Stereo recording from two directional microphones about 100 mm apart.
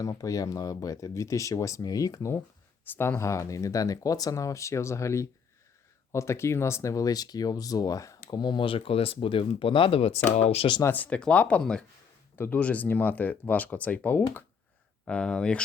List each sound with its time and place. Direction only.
0.0 s speech: 35° left (ahead or behind)
2.8 s speech: 20° left (ahead or behind); by 10.2 s 80° left
10.4 s speech: 90° left
10.8 s speech: 15° left (ahead or behind)